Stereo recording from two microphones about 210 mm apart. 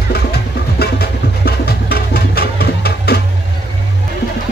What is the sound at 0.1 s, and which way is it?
Music, 50° left (ahead or behind).